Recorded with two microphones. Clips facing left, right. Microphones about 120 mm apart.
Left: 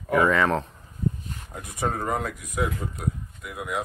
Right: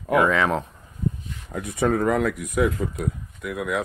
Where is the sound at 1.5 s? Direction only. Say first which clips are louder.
Right 7 dB; 75° right (ahead or behind); by 3.8 s 90° right.